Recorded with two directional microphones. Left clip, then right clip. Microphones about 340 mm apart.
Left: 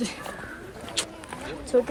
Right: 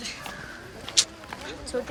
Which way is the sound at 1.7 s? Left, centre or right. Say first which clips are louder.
Left 9 dB; centre.